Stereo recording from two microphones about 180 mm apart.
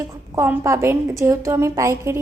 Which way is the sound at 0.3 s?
15° right (ahead or behind).